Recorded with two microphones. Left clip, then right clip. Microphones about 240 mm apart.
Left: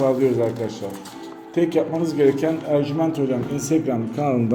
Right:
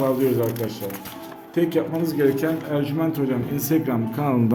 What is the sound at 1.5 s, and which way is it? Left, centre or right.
A man's voice, centre.